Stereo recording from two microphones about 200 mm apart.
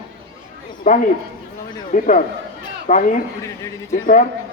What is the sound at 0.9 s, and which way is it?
Speech, 45° left (ahead or behind).